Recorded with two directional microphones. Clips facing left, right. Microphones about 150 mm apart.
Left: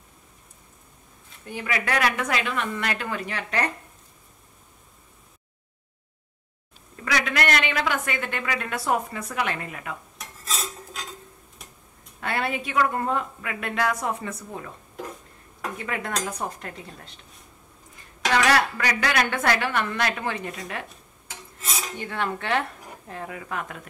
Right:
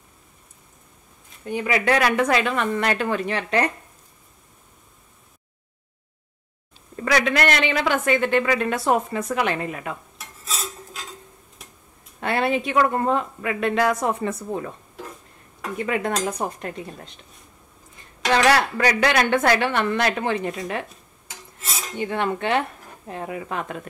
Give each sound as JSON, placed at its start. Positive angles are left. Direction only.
{"t": 1.5, "sound": "a woman's voice", "side_deg": -25}
{"t": 2.5, "sound": "speech", "side_deg": -40}
{"t": 7.3, "sound": "a woman's voice", "side_deg": -30}
{"t": 10.1, "sound": "cutlery", "side_deg": -5}
{"t": 12.2, "sound": "a woman's voice", "side_deg": -25}
{"t": 15.8, "sound": "a woman's voice", "side_deg": -20}
{"t": 18.3, "sound": "a woman's voice", "side_deg": -30}
{"t": 21.9, "sound": "a woman's voice", "side_deg": -20}